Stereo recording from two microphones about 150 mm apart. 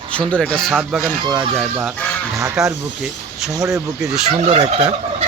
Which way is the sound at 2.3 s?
20° right (ahead or behind).